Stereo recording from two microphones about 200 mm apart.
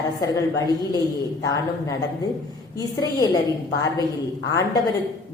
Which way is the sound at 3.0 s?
20° left (ahead or behind).